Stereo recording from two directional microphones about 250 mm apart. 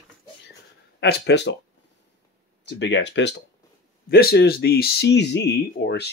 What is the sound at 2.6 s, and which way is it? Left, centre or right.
Speech, left.